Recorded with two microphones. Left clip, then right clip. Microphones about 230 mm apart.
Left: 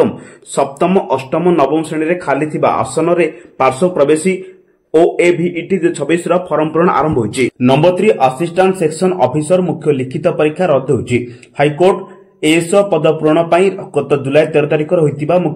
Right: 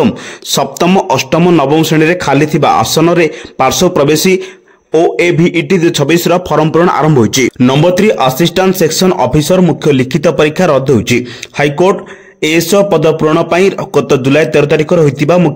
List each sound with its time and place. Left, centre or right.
0.6 s speech: right